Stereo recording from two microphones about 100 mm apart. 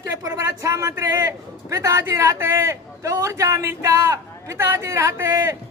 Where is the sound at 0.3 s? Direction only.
35° right (ahead or behind).